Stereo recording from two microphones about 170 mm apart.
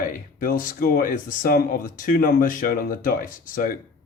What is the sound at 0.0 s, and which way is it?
Speech, 55° left (ahead or behind).